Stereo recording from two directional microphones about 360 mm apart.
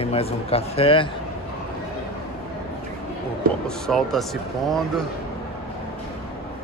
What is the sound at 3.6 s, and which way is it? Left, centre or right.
Speech, centre.